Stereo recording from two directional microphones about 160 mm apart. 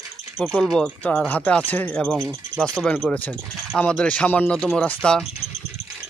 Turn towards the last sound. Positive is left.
turn(degrees=5)  # may be behind; listen again after turning